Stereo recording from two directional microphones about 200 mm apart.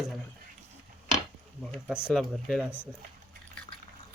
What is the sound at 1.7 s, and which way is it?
Speech, 5° right (ahead or behind).